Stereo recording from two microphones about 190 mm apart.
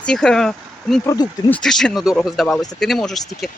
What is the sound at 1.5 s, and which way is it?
Speech, 5° left (ahead or behind).